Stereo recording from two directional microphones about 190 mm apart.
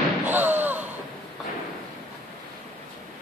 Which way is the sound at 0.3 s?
10° right (ahead or behind).